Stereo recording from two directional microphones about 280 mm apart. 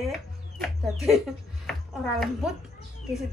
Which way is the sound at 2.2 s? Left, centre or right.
Centre.